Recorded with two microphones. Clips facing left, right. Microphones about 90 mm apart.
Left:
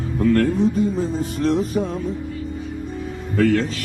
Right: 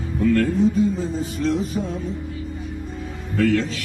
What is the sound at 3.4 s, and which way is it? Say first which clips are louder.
Speech: left 2 dB; 45° left (ahead or behind).